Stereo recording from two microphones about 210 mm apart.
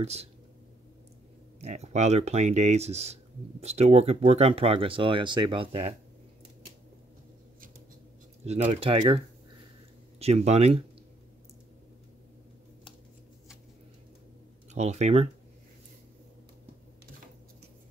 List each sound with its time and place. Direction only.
0.0 s speech: 30° right (ahead or behind)
1.6 s speech: 30° right (ahead or behind)
8.5 s speech: 30° right (ahead or behind)
14.7 s speech: 35° right (ahead or behind)